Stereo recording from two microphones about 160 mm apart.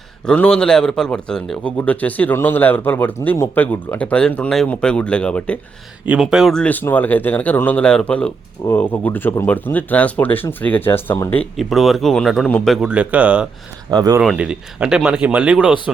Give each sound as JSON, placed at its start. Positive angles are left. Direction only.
{"t": 0.3, "sound": "speech", "side_deg": 5}
{"t": 11.5, "sound": "speech", "side_deg": 0}
{"t": 13.9, "sound": "speech", "side_deg": -25}
{"t": 14.2, "sound": "speech", "side_deg": -5}